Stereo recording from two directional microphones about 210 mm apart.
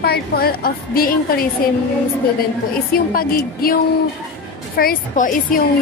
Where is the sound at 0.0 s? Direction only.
50° left (ahead or behind).